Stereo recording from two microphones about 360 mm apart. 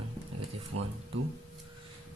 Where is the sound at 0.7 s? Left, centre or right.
Right.